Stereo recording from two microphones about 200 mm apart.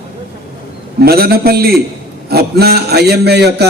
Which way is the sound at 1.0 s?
50° right (ahead or behind).